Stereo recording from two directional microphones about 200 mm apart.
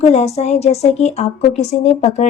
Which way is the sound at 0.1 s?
35° left (ahead or behind).